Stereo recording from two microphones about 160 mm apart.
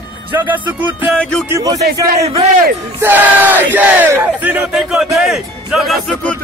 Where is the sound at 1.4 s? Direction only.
20° right (ahead or behind).